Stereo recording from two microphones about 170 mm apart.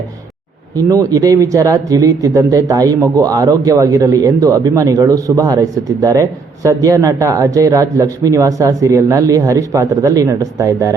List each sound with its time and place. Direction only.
0.8 s speech: 20° right (ahead or behind)